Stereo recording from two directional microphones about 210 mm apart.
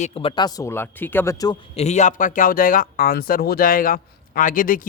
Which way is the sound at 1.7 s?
35° left (ahead or behind).